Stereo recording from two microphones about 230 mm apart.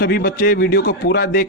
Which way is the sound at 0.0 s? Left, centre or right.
Left.